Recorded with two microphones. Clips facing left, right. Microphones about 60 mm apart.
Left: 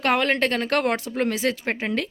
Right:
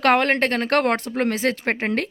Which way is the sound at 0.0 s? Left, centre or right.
Right.